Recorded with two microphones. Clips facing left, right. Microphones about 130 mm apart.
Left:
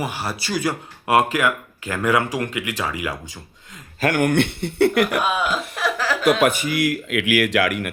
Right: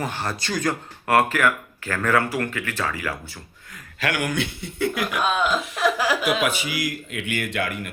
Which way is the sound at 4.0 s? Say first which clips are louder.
Left 7 dB; 50° left (ahead or behind).